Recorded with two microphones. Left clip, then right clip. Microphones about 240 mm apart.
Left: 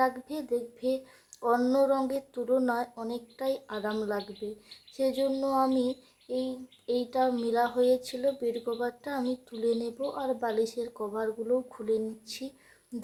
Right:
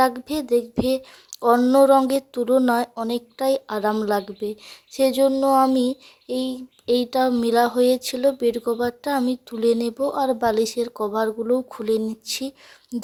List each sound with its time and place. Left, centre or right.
0.0 s speech: right